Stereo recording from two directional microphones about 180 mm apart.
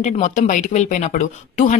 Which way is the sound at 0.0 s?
40° left (ahead or behind).